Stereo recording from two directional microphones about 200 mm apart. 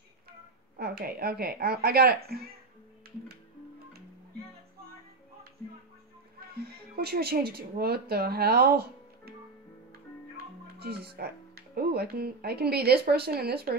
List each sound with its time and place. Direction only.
0.7 s speech: 50° right (ahead or behind)
6.5 s speech: 50° right (ahead or behind)
10.8 s speech: 50° right (ahead or behind)